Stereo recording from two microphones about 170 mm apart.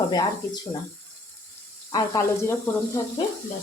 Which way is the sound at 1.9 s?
20° left (ahead or behind).